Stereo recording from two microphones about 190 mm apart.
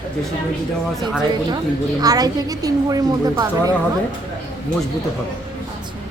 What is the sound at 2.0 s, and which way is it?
A woman's voice, 20° right (ahead or behind).